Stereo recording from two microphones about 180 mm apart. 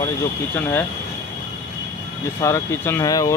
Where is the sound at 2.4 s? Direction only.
15° left (ahead or behind).